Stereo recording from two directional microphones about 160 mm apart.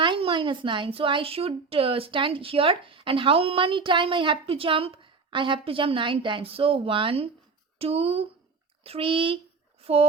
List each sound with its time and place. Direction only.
0.0 s a woman's voice: 30° right (ahead or behind)